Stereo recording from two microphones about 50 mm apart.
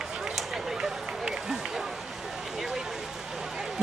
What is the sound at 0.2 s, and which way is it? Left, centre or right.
Run, centre.